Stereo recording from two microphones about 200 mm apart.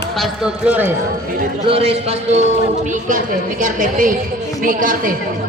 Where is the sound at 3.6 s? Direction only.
40° right (ahead or behind).